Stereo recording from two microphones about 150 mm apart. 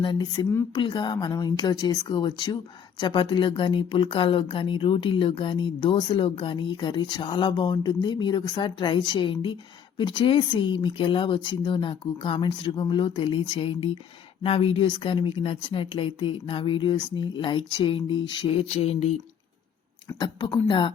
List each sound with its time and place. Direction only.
0.0 s speech: 30° left (ahead or behind)
20.1 s speech: 30° left (ahead or behind)